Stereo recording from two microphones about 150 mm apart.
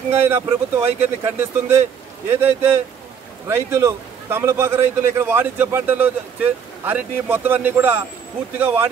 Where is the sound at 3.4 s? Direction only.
20° right (ahead or behind).